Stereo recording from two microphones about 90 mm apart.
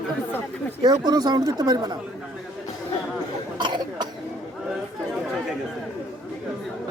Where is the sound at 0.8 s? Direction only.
50° right (ahead or behind).